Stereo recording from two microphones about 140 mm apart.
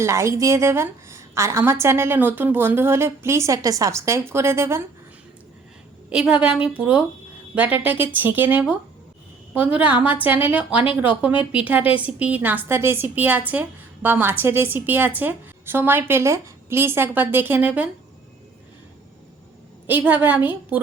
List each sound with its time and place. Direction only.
0.0 s a woman's voice: 20° right (ahead or behind)
6.1 s a woman's voice: 10° right (ahead or behind)
9.7 s a woman's voice: 10° right (ahead or behind)
19.9 s a woman's voice: 10° right (ahead or behind)